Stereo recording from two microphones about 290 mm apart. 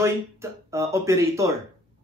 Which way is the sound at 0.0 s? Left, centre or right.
Centre.